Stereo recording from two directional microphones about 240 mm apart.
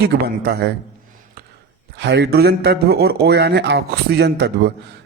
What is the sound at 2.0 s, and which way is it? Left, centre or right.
Speech, right.